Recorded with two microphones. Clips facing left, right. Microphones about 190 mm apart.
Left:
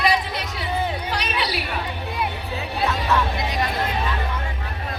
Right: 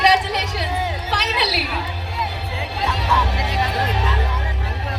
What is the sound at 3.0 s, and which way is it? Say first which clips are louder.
Music: even; 75° right (ahead or behind).